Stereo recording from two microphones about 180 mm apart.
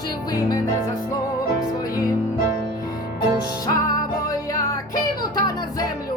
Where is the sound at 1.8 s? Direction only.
20° left (ahead or behind).